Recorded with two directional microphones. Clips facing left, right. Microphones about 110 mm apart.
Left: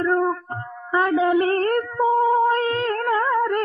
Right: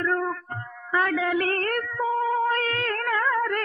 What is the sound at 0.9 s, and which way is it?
Music, 25° left (ahead or behind).